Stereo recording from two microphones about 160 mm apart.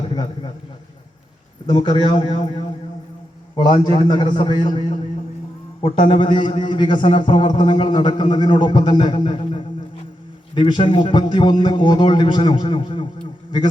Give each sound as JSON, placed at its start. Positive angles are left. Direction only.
{"t": 1.6, "sound": "a man's voice", "side_deg": 30}